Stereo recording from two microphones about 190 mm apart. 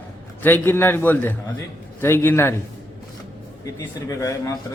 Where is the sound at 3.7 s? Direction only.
15° left (ahead or behind).